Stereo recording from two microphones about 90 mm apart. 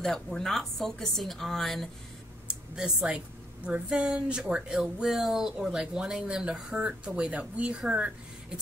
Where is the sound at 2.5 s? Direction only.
10° right (ahead or behind).